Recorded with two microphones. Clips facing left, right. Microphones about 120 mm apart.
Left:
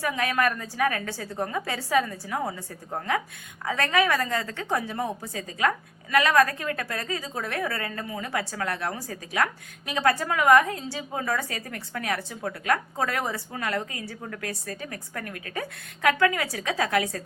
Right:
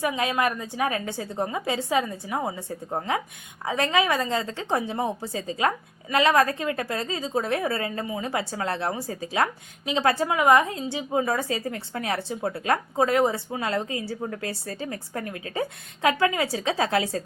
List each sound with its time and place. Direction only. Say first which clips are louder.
0.0 s a woman's voice: right 1 dB; 20° right (ahead or behind)